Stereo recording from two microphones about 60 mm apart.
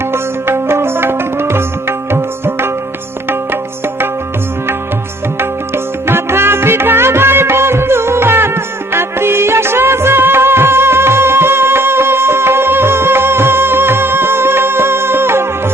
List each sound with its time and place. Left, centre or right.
0.1 s music: right
5.4 s music: right